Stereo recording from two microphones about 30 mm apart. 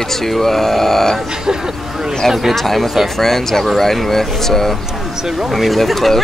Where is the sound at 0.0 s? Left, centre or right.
Centre.